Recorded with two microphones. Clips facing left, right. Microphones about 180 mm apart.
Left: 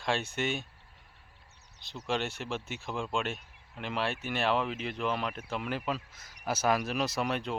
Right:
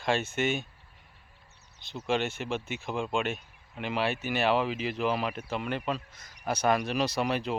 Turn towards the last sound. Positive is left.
turn(degrees=0)  # may be behind; listen again after turning